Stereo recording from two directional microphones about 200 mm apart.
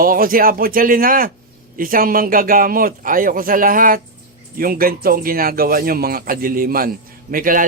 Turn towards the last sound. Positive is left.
turn(degrees=-45)  # may be behind; listen again after turning